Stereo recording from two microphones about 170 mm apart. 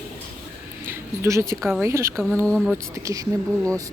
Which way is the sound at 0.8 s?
15° right (ahead or behind).